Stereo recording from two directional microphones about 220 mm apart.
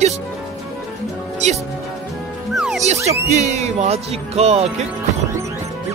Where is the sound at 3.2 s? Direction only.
30° right (ahead or behind).